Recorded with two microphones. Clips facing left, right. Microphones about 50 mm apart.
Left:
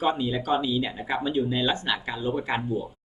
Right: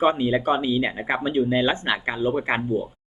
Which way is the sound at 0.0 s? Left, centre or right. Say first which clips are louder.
Right 5 dB; right.